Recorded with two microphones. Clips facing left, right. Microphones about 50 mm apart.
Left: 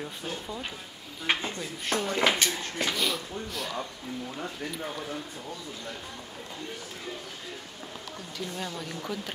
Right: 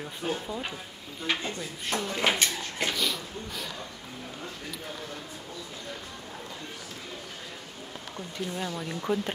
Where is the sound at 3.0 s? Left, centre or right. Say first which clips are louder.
Left 1 dB; centre.